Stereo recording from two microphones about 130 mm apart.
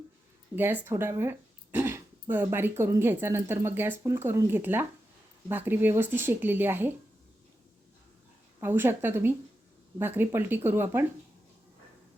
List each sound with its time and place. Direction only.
0.5 s speech: 15° right (ahead or behind)
8.6 s speech: 15° right (ahead or behind)